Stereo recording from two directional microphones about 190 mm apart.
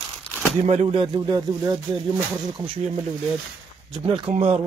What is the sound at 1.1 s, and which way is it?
Speech, 20° right (ahead or behind).